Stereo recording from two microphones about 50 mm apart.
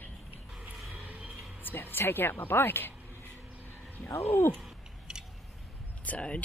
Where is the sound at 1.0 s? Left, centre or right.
Right.